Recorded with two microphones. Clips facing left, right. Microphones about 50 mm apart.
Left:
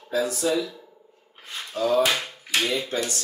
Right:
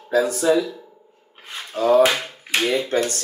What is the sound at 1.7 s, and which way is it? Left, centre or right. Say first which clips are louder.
Speech: right 6 dB; right.